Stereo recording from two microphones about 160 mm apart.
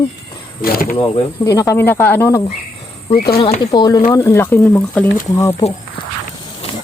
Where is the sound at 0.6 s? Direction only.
65° left (ahead or behind).